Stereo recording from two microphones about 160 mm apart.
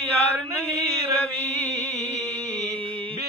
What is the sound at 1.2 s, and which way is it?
Music, 5° left (ahead or behind).